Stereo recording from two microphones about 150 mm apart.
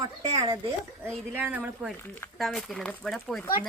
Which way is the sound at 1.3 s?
10° right (ahead or behind).